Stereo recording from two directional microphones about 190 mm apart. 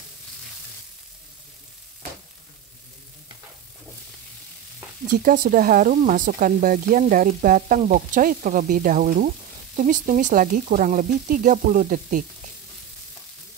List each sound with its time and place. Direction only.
5.1 s speech: 45° right (ahead or behind)